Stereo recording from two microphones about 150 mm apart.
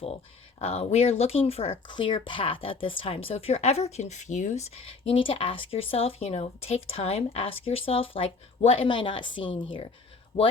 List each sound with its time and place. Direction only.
0.6 s speech: 45° left (ahead or behind)